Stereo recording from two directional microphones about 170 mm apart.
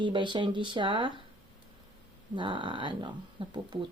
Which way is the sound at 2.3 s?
30° right (ahead or behind).